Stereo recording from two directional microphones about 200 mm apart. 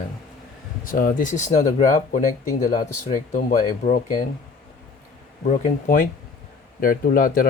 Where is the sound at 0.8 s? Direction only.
40° left (ahead or behind).